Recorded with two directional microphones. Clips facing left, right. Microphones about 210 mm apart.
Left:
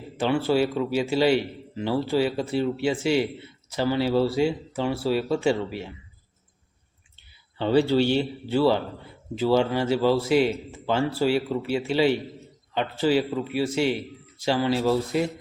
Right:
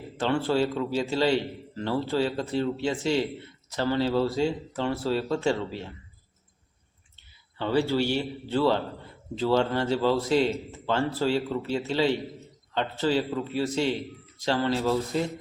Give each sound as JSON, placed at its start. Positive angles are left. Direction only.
{"t": 0.2, "sound": "a man's voice", "side_deg": 10}
{"t": 7.6, "sound": "speech", "side_deg": 20}
{"t": 8.4, "sound": "a man's voice", "side_deg": 10}